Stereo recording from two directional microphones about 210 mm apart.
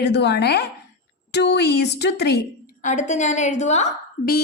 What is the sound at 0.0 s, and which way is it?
A woman's voice, 55° left (ahead or behind).